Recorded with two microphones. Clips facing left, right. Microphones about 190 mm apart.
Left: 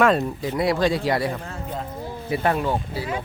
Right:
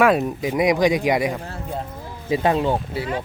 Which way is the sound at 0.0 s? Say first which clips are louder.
Right 2 dB; 15° right (ahead or behind).